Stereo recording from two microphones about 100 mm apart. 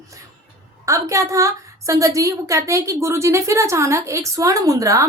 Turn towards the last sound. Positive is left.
turn(degrees=-35)  # may be behind; listen again after turning